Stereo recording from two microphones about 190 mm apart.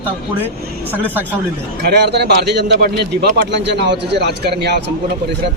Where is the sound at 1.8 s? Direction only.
60° right (ahead or behind).